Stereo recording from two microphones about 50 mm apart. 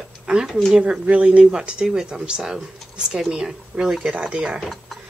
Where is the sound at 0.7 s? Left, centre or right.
Centre.